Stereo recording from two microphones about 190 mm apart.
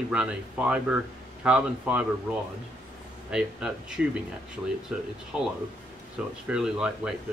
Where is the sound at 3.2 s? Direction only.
5° right (ahead or behind).